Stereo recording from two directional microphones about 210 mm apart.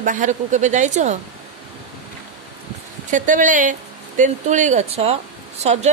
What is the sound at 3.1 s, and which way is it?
Speech, 35° right (ahead or behind).